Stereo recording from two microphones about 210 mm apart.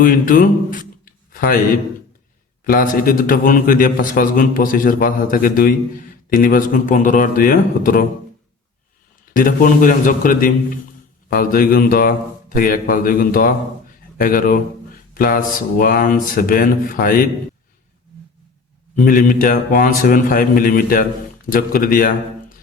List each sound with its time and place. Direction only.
0.0 s a man's voice: 40° left (ahead or behind)
9.3 s a man's voice: 40° left (ahead or behind)
18.9 s a man's voice: 40° left (ahead or behind)